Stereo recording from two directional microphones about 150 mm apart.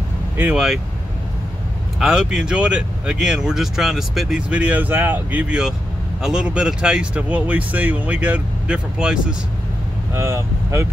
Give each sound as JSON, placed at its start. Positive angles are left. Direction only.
{"t": 0.4, "sound": "speech", "side_deg": -10}
{"t": 2.0, "sound": "speech", "side_deg": -5}
{"t": 10.1, "sound": "speech", "side_deg": -15}